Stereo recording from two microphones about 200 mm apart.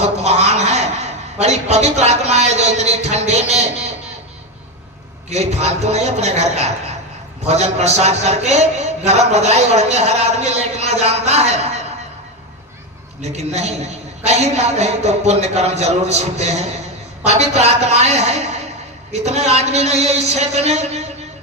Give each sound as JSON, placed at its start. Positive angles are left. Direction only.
{"t": 0.0, "sound": "a man's voice", "side_deg": -35}
{"t": 5.3, "sound": "a man's voice", "side_deg": -35}
{"t": 13.2, "sound": "a man's voice", "side_deg": -35}